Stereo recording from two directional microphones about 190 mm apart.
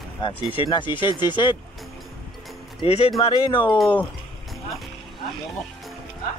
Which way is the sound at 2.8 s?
35° left (ahead or behind).